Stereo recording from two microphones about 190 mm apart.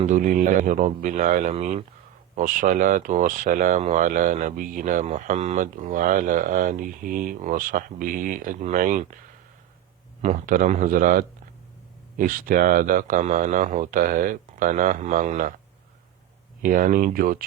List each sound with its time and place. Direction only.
0.0 s a man's voice: 40° right (ahead or behind)
10.2 s speech: 40° right (ahead or behind)
16.6 s speech: 45° right (ahead or behind)